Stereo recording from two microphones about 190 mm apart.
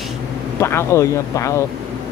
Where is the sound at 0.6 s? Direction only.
15° left (ahead or behind).